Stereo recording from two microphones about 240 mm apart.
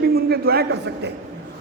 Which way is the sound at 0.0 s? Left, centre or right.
Right.